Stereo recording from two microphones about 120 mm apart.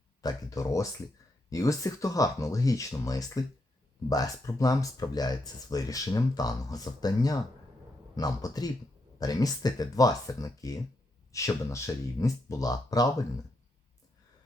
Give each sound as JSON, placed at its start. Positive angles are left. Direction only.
{"t": 0.2, "sound": "speech", "side_deg": 30}